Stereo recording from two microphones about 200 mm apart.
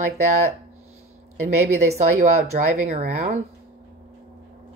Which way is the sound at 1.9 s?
35° right (ahead or behind).